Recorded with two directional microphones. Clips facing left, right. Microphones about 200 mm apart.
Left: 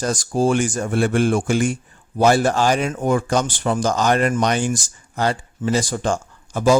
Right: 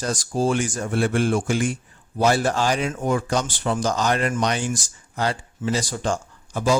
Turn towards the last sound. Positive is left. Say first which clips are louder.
# left 5 dB
turn(degrees=50)  # may be behind; listen again after turning